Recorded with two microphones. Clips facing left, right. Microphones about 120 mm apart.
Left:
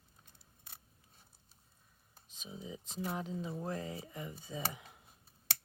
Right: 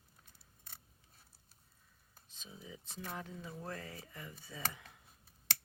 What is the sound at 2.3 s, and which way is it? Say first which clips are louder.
Speech: left 6 dB; 15° left (ahead or behind).